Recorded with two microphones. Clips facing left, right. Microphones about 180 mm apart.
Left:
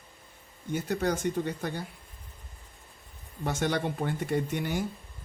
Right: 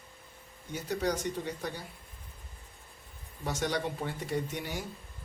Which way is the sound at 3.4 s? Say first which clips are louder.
Left 3 dB; 55° left (ahead or behind).